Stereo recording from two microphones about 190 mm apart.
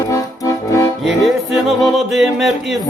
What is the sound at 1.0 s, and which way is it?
Speech, centre (ahead or behind).